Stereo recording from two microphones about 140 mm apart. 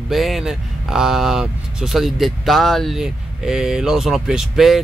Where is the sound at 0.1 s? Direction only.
Centre (ahead or behind).